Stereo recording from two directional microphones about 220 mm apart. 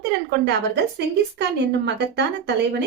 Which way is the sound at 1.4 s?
50° right (ahead or behind).